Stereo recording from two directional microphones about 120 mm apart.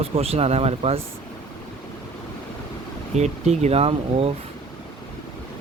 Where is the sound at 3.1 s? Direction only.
65° right (ahead or behind).